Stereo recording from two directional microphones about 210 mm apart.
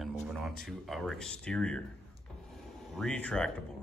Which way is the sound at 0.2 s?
Centre (ahead or behind).